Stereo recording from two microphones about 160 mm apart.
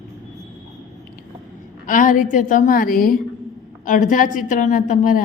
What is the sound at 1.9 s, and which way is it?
A woman's voice, 55° left (ahead or behind).